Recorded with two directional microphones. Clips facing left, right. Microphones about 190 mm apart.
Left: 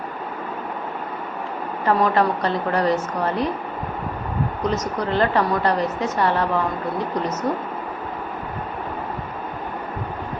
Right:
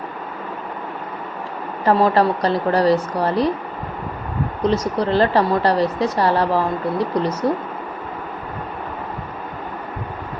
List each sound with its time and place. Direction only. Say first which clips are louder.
1.8 s speech: right 3 dB; 35° right (ahead or behind)
4.6 s speech: right 6 dB; 30° right (ahead or behind)